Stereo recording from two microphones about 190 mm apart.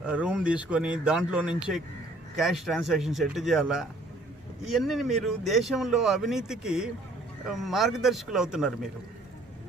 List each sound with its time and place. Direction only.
0.0 s speech: 5° right (ahead or behind)